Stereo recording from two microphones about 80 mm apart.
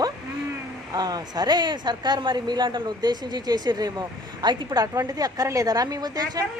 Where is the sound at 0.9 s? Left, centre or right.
Right.